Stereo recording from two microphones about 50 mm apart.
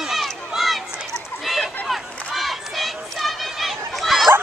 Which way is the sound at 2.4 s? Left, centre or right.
Centre.